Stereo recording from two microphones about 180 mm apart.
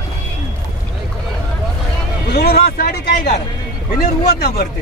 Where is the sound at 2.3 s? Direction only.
60° left (ahead or behind).